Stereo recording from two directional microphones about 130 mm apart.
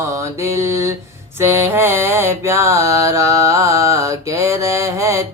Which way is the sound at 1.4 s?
20° right (ahead or behind).